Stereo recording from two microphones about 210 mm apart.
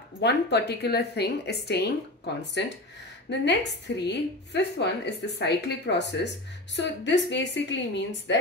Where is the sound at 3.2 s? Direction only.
55° left (ahead or behind).